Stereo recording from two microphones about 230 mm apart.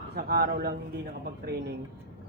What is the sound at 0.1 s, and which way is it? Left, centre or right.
Speech, right.